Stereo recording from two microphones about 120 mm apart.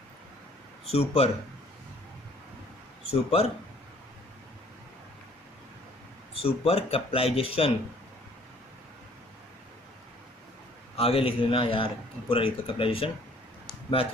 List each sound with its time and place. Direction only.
0.9 s speech: 60° left (ahead or behind)
3.1 s speech: 55° left (ahead or behind)
6.3 s speech: 55° left (ahead or behind)
10.9 s speech: 55° left (ahead or behind)